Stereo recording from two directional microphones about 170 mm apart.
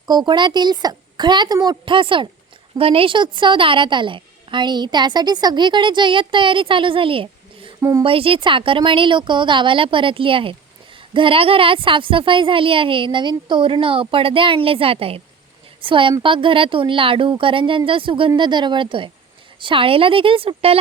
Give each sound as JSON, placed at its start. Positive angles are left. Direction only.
{"t": 0.1, "sound": "a woman's voice", "side_deg": -25}
{"t": 7.8, "sound": "speech", "side_deg": -20}
{"t": 8.0, "sound": "a woman's voice", "side_deg": -30}